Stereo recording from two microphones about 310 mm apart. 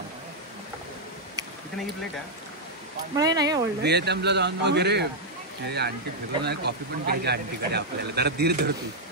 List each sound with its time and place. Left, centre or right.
3.2 s speech: centre
3.8 s speech: right